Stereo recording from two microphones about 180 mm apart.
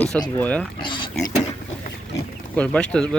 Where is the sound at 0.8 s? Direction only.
25° left (ahead or behind).